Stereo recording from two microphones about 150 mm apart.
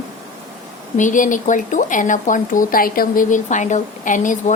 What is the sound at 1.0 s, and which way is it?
Speech, 60° left (ahead or behind).